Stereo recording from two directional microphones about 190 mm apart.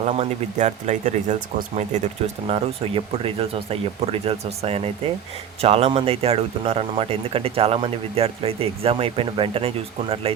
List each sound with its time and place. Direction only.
0.2 s speech: 40° right (ahead or behind)